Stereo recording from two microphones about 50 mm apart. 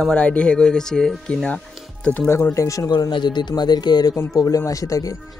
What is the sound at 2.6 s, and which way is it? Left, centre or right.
Speech, left.